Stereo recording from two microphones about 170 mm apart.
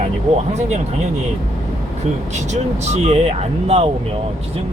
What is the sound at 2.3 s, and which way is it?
Speech, 40° right (ahead or behind).